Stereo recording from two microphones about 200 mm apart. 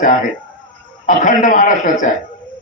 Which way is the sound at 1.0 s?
40° left (ahead or behind).